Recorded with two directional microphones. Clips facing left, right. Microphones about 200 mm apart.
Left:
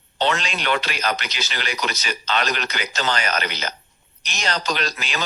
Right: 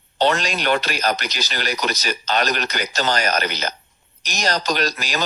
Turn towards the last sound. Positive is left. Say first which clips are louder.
# right 4 dB
turn(degrees=-40)  # may be behind; listen again after turning